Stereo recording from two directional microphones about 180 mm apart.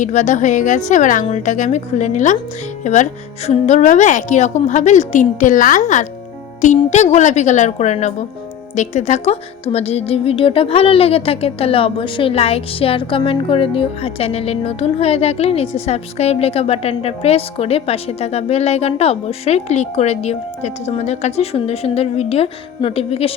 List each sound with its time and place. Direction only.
0.0 s a woman's voice: 45° left (ahead or behind)